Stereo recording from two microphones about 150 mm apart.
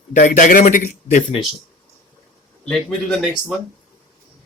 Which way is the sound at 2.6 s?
Centre (ahead or behind).